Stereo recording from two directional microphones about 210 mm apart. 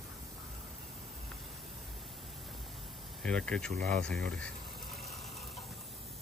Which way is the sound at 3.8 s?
50° right (ahead or behind).